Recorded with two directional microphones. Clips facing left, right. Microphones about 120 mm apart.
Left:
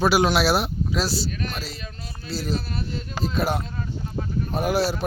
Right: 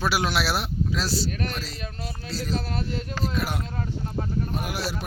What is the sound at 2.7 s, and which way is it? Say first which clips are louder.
Speech: right 1 dB; 90° right.